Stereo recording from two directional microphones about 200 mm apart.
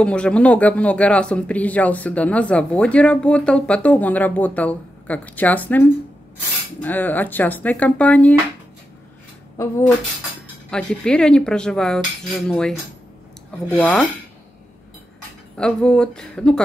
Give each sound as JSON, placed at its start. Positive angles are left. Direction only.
{"t": 0.0, "sound": "speech", "side_deg": 5}
{"t": 9.6, "sound": "speech", "side_deg": 15}
{"t": 10.7, "sound": "speech", "side_deg": 5}
{"t": 15.5, "sound": "speech", "side_deg": 5}